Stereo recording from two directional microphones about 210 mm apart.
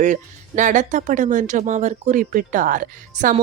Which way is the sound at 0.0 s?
35° right (ahead or behind).